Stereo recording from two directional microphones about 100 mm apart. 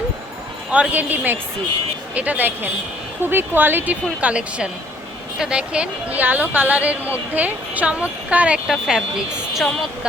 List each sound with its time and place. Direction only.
0.7 s speech: 15° right (ahead or behind)